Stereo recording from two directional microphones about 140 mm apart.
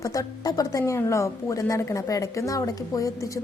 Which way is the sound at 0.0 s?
25° left (ahead or behind).